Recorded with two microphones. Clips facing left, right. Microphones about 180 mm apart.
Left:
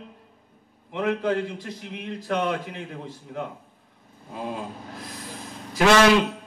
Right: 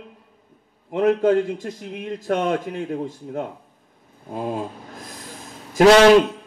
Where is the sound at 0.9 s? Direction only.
45° right (ahead or behind).